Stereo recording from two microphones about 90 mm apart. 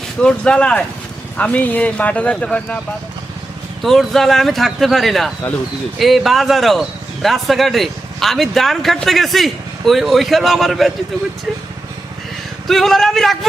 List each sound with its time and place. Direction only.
0.2 s speech: 10° left (ahead or behind)
3.8 s speech: 5° left (ahead or behind)
12.6 s speech: 5° left (ahead or behind)